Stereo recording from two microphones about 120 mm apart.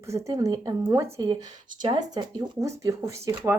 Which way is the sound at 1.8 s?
45° right (ahead or behind).